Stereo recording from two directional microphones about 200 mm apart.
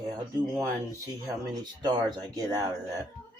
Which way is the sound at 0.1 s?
15° right (ahead or behind).